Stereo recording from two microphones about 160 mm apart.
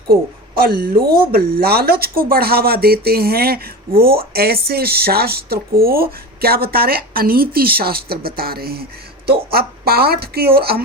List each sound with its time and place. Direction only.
0.1 s speech: 70° right (ahead or behind)